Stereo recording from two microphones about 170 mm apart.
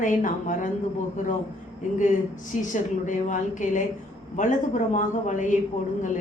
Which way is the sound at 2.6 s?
45° left (ahead or behind).